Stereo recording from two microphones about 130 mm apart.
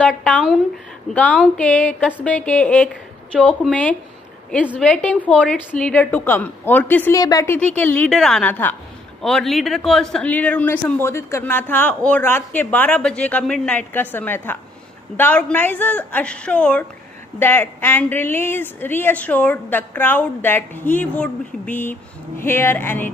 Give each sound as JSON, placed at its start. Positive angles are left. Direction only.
{"t": 0.0, "sound": "a man's voice", "side_deg": 10}
{"t": 7.2, "sound": "speech", "side_deg": 25}
{"t": 7.5, "sound": "a man's voice", "side_deg": 15}
{"t": 9.2, "sound": "a man's voice", "side_deg": 5}